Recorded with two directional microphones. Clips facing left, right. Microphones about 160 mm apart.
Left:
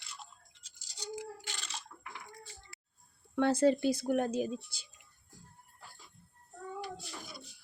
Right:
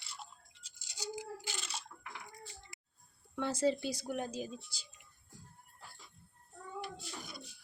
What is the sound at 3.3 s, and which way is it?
Speech, 60° left (ahead or behind).